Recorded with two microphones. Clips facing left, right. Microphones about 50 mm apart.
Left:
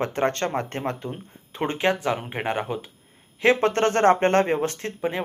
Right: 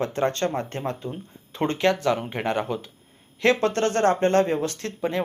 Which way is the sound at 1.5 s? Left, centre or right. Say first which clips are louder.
Right 1 dB; centre.